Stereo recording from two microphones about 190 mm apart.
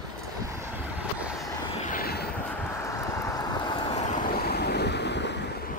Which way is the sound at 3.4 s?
25° left (ahead or behind).